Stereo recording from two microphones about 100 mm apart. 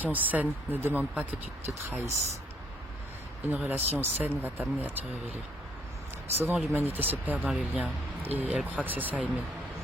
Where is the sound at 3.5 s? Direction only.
15° right (ahead or behind).